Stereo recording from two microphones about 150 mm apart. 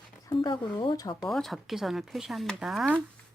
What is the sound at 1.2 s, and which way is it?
Speech, centre (ahead or behind).